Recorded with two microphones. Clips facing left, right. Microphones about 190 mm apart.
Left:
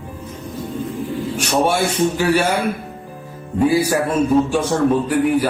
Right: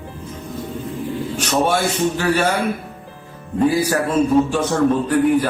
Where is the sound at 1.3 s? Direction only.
10° left (ahead or behind).